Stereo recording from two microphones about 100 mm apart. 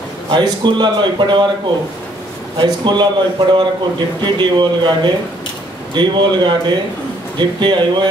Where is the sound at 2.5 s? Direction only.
50° right (ahead or behind).